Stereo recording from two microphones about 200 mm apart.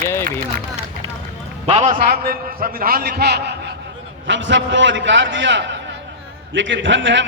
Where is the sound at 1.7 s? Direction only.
30° right (ahead or behind).